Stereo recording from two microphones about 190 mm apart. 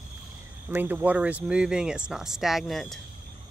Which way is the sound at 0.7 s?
10° right (ahead or behind).